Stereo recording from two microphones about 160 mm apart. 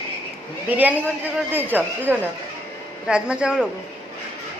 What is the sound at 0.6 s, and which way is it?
A man's voice, 10° right (ahead or behind).